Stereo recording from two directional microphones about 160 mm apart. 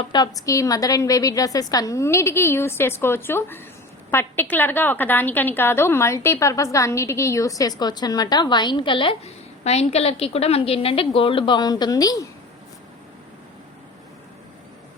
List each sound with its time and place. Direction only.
0.1 s a woman's voice: 25° left (ahead or behind)